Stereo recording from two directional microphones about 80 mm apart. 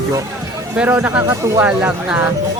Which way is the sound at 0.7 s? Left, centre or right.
Centre.